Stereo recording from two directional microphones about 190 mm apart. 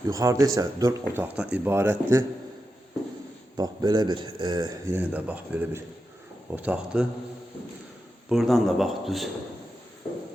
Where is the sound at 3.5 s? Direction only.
20° right (ahead or behind).